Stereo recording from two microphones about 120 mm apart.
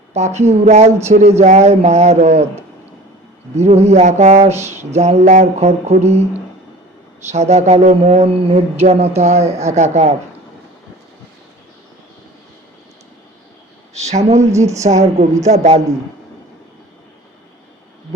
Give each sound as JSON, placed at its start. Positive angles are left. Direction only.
{"t": 0.1, "sound": "speech", "side_deg": -70}
{"t": 3.5, "sound": "speech", "side_deg": -65}
{"t": 4.5, "sound": "a sound", "side_deg": -20}
{"t": 4.9, "sound": "music", "side_deg": -65}
{"t": 7.3, "sound": "speech", "side_deg": -70}
{"t": 8.8, "sound": "music", "side_deg": -60}
{"t": 9.7, "sound": "speech", "side_deg": -75}
{"t": 13.9, "sound": "speech", "side_deg": -65}
{"t": 15.4, "sound": "music", "side_deg": -65}